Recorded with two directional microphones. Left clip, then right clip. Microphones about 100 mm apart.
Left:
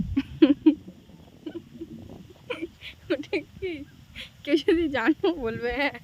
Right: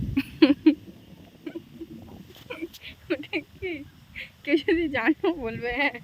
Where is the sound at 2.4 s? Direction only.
75° left (ahead or behind); by 3.8 s 50° left (ahead or behind).